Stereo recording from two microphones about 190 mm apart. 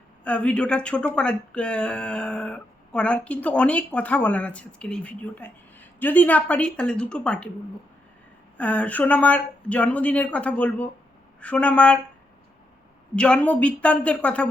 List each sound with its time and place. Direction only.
0.3 s speech: 5° left (ahead or behind)
8.5 s speech: 5° left (ahead or behind)
13.1 s speech: 5° left (ahead or behind)